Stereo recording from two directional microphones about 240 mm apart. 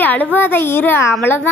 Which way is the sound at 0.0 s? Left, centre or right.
Centre.